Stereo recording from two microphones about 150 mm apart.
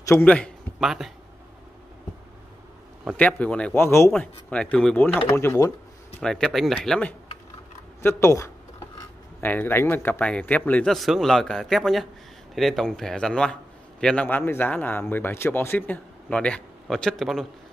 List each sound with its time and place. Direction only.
0.0 s a man's voice: 10° left (ahead or behind)
0.7 s speech: centre (ahead or behind)
3.2 s a man's voice: 10° left (ahead or behind)
6.2 s speech: centre (ahead or behind)
8.0 s a man's voice: 15° left (ahead or behind); by 17.5 s centre (ahead or behind)